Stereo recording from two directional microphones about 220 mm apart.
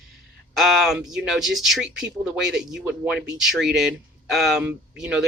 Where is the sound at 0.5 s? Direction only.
Centre (ahead or behind).